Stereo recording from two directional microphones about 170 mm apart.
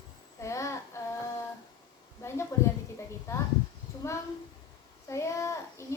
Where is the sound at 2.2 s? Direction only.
15° left (ahead or behind).